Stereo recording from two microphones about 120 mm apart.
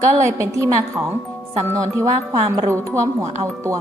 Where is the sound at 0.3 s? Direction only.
25° right (ahead or behind).